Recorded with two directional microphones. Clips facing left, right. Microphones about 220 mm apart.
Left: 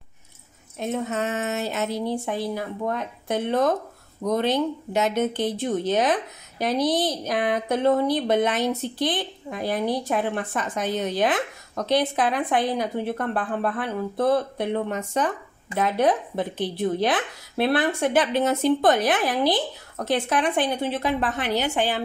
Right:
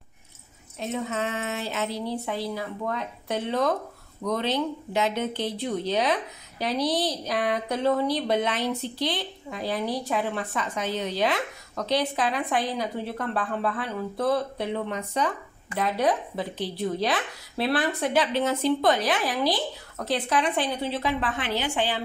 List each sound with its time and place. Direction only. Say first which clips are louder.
0.7 s a woman's voice: left 3 dB; 45° left (ahead or behind)